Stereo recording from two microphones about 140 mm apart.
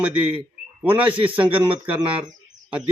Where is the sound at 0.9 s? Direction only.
10° right (ahead or behind).